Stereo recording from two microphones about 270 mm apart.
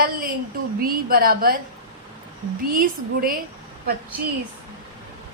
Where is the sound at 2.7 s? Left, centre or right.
Right.